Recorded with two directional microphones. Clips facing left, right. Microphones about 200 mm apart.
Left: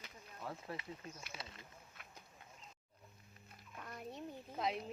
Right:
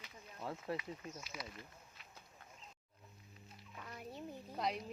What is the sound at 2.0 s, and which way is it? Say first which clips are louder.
Duck: left 2 dB; 55° left (ahead or behind).